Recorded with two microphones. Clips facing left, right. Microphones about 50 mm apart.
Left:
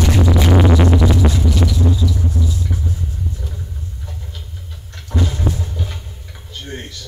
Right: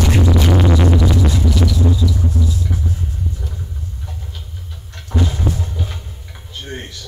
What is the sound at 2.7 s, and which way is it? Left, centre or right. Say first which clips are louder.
Rumble: right 1 dB; centre.